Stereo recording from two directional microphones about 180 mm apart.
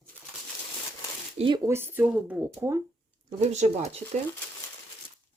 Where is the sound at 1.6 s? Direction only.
15° right (ahead or behind).